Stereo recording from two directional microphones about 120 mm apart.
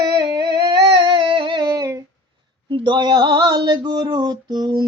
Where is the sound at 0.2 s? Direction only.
40° right (ahead or behind).